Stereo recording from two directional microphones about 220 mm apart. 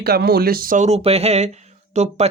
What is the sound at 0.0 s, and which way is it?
Speech, 45° right (ahead or behind).